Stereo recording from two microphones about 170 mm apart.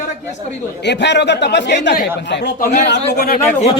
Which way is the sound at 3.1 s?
60° left (ahead or behind).